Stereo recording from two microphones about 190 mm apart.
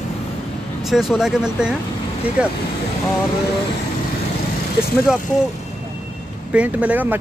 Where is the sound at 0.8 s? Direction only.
Centre (ahead or behind).